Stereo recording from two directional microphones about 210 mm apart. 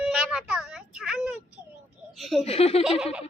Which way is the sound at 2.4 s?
30° left (ahead or behind).